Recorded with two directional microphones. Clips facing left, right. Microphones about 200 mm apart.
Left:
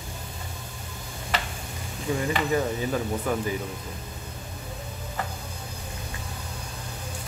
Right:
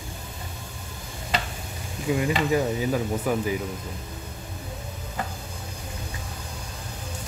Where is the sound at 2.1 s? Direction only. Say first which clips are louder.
Right 2 dB; 10° right (ahead or behind).